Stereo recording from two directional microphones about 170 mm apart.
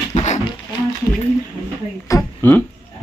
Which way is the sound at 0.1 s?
45° left (ahead or behind).